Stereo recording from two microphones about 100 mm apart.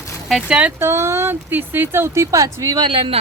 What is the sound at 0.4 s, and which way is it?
Speech, 10° right (ahead or behind).